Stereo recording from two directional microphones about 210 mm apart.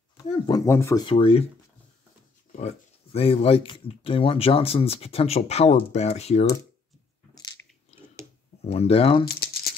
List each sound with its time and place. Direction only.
0.2 s speech: 20° left (ahead or behind)
2.5 s speech: 30° left (ahead or behind)
8.6 s speech: 30° left (ahead or behind)